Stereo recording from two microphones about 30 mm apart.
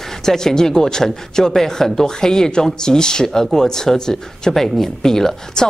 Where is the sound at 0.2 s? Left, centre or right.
Centre.